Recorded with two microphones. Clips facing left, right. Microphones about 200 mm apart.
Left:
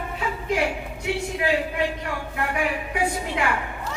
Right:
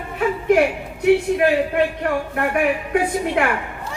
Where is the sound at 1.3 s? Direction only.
60° right (ahead or behind).